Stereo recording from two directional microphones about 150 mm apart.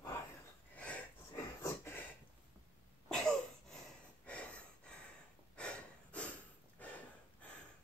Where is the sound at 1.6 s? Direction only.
20° left (ahead or behind).